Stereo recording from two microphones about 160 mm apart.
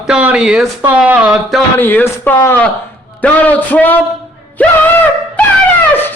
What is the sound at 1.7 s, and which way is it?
Speech, 10° left (ahead or behind).